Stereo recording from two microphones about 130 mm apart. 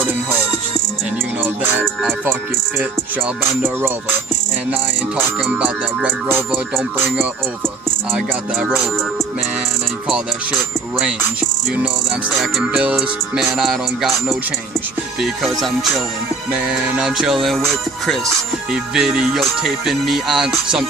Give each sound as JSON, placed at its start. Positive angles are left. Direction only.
{"t": 0.0, "sound": "music", "side_deg": -15}
{"t": 1.4, "sound": "music", "side_deg": -15}
{"t": 2.7, "sound": "music", "side_deg": 0}
{"t": 3.6, "sound": "music", "side_deg": -15}
{"t": 5.5, "sound": "music", "side_deg": -10}
{"t": 8.5, "sound": "music", "side_deg": 0}
{"t": 11.0, "sound": "music", "side_deg": -10}
{"t": 18.7, "sound": "music", "side_deg": -5}